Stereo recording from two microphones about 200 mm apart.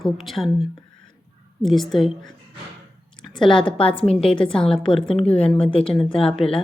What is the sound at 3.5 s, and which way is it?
Speech, 25° left (ahead or behind).